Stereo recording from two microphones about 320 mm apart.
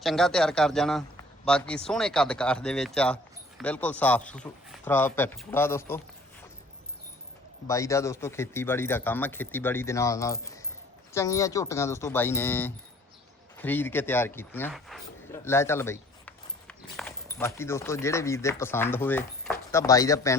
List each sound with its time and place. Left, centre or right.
0.0 s a man's voice: centre
7.7 s speech: centre